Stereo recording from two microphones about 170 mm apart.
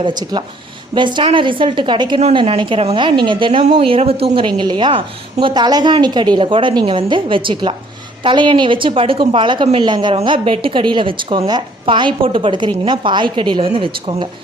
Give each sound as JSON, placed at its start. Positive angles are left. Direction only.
{"t": 0.0, "sound": "a woman's voice", "side_deg": -25}